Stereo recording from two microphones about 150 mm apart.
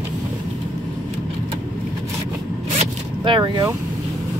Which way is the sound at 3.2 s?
30° right (ahead or behind).